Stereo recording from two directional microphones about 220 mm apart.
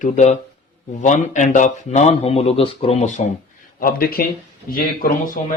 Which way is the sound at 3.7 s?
40° left (ahead or behind).